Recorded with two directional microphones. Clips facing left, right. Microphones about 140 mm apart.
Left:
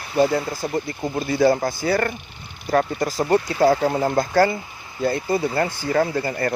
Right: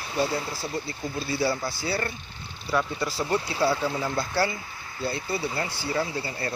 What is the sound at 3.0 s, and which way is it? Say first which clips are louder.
Speech: left 7 dB; 45° left (ahead or behind).